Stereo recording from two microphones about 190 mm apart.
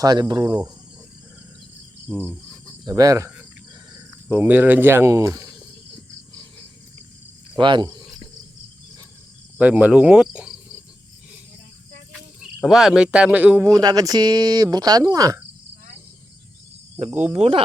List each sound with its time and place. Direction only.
0.0 s speech: 20° right (ahead or behind)
2.0 s cricket: 10° right (ahead or behind)
2.8 s speech: 20° right (ahead or behind)
7.5 s speech: 25° right (ahead or behind)
9.6 s cricket: 10° right (ahead or behind)
12.5 s speech: centre (ahead or behind); by 15.4 s 20° right (ahead or behind)
17.1 s cricket: 10° right (ahead or behind)
17.3 s speech: 30° right (ahead or behind)